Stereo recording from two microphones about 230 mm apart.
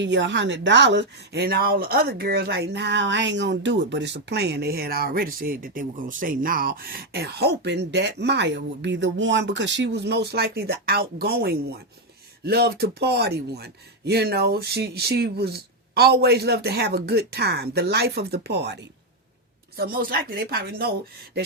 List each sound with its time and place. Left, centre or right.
0.0 s a woman's voice: right